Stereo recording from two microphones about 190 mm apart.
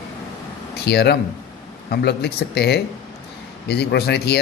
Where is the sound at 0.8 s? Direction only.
60° left (ahead or behind).